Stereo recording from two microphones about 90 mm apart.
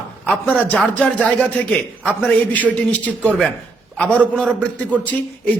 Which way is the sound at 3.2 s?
10° left (ahead or behind).